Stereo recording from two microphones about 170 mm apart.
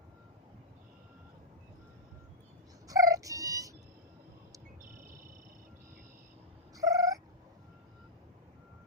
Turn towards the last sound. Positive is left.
turn(degrees=-20)  # may be behind; listen again after turning